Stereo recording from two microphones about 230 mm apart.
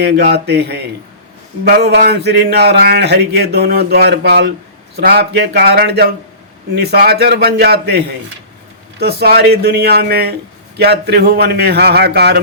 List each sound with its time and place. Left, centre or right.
0.0 s a man's voice: right